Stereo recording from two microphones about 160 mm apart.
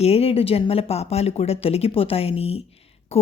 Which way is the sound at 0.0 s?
40° left (ahead or behind).